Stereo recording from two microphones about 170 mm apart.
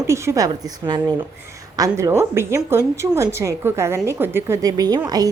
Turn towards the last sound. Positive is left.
turn(degrees=-20)  # may be behind; listen again after turning